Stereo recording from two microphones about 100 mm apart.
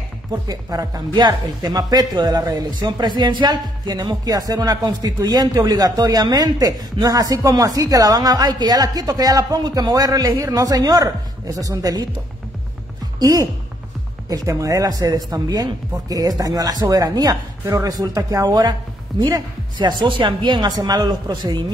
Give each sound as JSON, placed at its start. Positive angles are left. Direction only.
{"t": 0.3, "sound": "speech", "side_deg": -40}
{"t": 13.2, "sound": "speech", "side_deg": -35}